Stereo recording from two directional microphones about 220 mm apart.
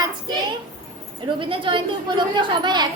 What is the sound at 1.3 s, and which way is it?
A child's voice, 25° right (ahead or behind).